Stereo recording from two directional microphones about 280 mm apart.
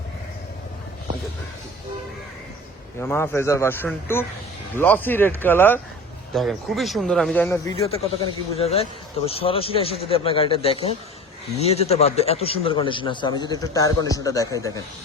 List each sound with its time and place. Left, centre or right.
3.0 s a man's voice: centre
7.8 s a man's voice: left